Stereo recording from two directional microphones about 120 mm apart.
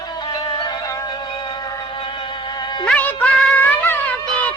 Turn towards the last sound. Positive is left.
turn(degrees=15)  # may be behind; listen again after turning